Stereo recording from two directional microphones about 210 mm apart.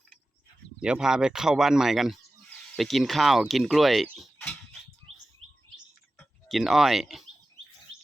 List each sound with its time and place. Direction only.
0.8 s speech: 5° right (ahead or behind)
5.4 s chirp: 85° right
5.7 s bird: centre (ahead or behind)